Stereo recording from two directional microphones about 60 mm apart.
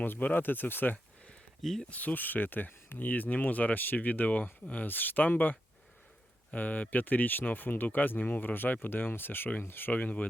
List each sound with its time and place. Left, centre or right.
0.0 s speech: left
1.6 s speech: centre
1.9 s speech: left